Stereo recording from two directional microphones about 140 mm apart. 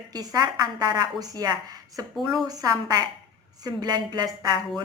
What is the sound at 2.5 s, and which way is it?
A woman's voice, 25° right (ahead or behind).